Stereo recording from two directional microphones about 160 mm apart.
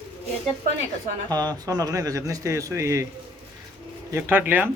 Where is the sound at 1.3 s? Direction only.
25° right (ahead or behind).